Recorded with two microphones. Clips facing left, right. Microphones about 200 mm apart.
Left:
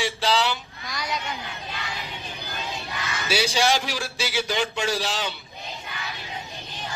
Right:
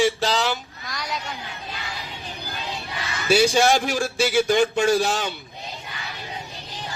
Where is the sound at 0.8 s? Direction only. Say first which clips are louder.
Left 2 dB; centre (ahead or behind).